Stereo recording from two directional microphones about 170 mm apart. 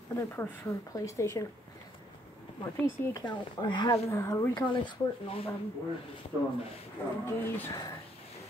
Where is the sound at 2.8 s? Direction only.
15° left (ahead or behind).